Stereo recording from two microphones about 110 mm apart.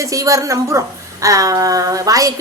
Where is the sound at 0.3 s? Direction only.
30° right (ahead or behind).